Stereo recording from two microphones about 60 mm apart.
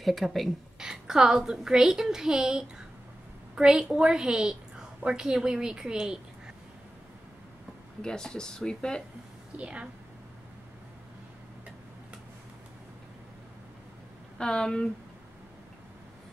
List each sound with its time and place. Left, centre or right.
0.0 s a woman's voice: centre
0.7 s a woman's voice: centre
8.0 s speech: centre
9.6 s a woman's voice: centre
14.4 s speech: centre